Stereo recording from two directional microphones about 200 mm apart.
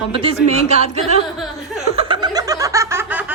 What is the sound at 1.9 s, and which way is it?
Snicker, 25° right (ahead or behind).